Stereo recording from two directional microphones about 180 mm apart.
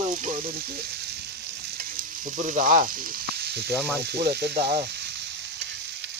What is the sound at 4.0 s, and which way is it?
Speech, 65° right (ahead or behind).